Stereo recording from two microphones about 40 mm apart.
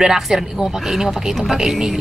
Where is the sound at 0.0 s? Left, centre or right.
Centre.